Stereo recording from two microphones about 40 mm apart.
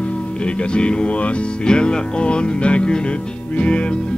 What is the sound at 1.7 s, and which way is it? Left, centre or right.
Music, left.